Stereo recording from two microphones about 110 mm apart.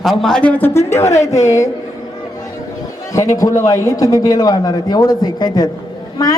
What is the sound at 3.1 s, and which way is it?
A woman's voice, 30° left (ahead or behind).